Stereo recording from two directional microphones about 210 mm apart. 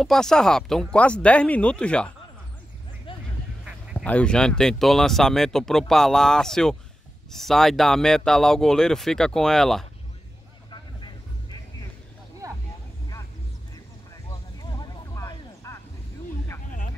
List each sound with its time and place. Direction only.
0.0 s speech: centre (ahead or behind)
3.1 s honk: 25° left (ahead or behind)
3.9 s speech: 5° left (ahead or behind)
10.7 s vehicle: 20° left (ahead or behind)
12.4 s a sound: 15° right (ahead or behind)
14.6 s a sound: 20° left (ahead or behind)